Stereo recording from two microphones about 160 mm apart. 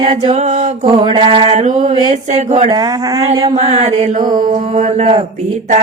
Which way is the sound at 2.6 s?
25° right (ahead or behind).